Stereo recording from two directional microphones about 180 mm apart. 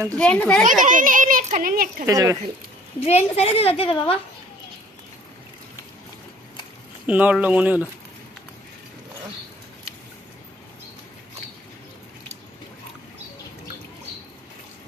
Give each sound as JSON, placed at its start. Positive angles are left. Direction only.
{"t": 0.1, "sound": "a child's voice", "side_deg": 5}
{"t": 0.8, "sound": "a child's voice", "side_deg": -45}
{"t": 2.0, "sound": "speech", "side_deg": -20}
{"t": 3.1, "sound": "a woman's voice", "side_deg": 35}
{"t": 7.1, "sound": "speech", "side_deg": -10}